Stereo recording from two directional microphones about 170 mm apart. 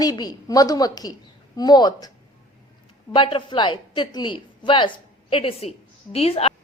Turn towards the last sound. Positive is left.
turn(degrees=35)  # may be behind; listen again after turning